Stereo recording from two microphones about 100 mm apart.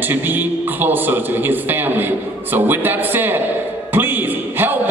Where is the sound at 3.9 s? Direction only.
20° right (ahead or behind).